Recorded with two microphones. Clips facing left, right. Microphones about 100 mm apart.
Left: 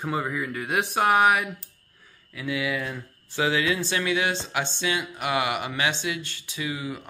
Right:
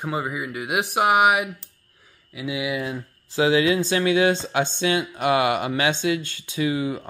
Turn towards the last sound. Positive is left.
turn(degrees=-25)  # may be behind; listen again after turning